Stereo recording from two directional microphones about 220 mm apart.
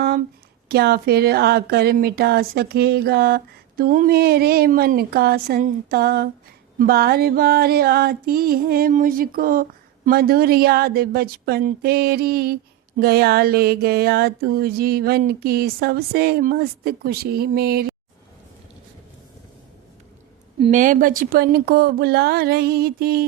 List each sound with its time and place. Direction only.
0.7 s speech: 45° right (ahead or behind)
20.6 s speech: 35° right (ahead or behind)